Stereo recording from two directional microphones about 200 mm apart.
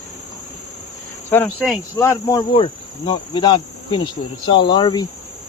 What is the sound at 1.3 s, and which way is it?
Speech, 10° left (ahead or behind).